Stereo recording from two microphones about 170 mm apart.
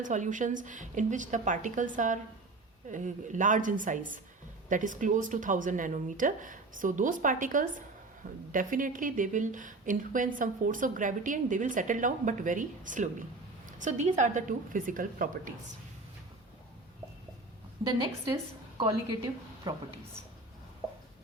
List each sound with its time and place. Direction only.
0.0 s a woman's voice: 45° right (ahead or behind)
17.8 s a woman's voice: 35° right (ahead or behind)
18.8 s a woman's voice: 25° right (ahead or behind)